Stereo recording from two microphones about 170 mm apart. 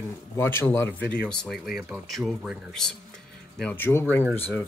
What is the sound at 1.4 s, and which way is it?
Speech, centre (ahead or behind).